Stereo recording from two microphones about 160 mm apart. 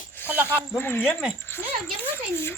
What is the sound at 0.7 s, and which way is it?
Speech, 15° left (ahead or behind).